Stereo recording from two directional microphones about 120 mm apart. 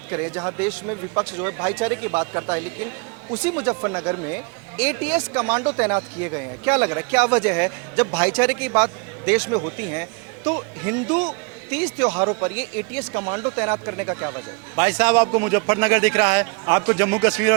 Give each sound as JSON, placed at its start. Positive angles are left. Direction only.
{"t": 0.1, "sound": "speech", "side_deg": -25}